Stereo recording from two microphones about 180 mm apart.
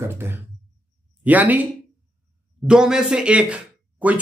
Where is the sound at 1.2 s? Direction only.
10° right (ahead or behind).